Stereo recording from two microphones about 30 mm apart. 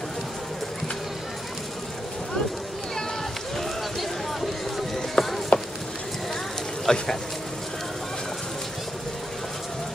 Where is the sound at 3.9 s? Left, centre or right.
Centre.